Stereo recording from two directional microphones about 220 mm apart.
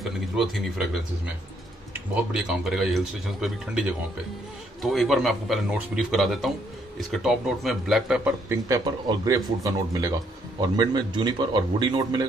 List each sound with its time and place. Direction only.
2.3 s speech: centre (ahead or behind)
4.8 s speech: centre (ahead or behind); by 12.3 s 20° right (ahead or behind)